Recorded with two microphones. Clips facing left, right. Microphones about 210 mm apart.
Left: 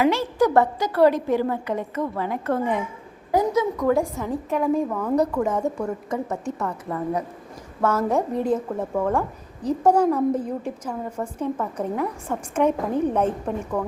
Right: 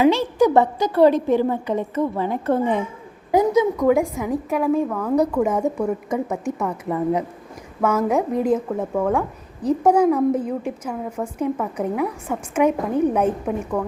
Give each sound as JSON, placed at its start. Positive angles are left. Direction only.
{"t": 0.0, "sound": "a woman's voice", "side_deg": -15}
{"t": 5.1, "sound": "a woman's voice", "side_deg": -10}